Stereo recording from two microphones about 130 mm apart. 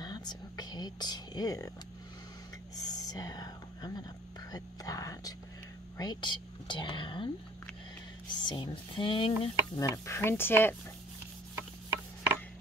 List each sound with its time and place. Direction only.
0.0 s whispering: 35° left (ahead or behind)
2.7 s whispering: 30° left (ahead or behind)
5.9 s speech: 35° left (ahead or behind)
8.3 s speech: 35° left (ahead or behind)
9.8 s speech: 25° left (ahead or behind)